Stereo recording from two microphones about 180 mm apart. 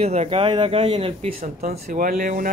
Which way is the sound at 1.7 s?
50° right (ahead or behind).